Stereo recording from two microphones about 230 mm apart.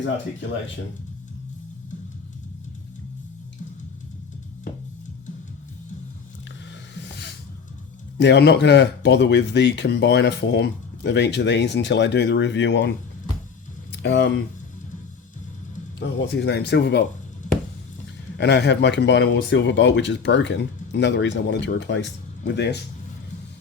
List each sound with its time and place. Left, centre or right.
6.9 s music: left
8.2 s speech: left
13.9 s speech: left
16.0 s speech: left
18.3 s speech: left